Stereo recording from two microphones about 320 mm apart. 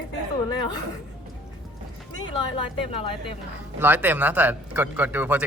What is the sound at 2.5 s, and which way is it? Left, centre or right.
Speech, centre.